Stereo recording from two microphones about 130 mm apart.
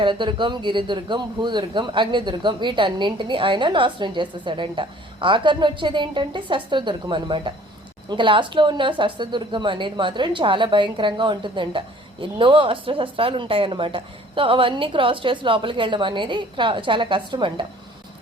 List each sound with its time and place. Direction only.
0.0 s speech: 40° right (ahead or behind)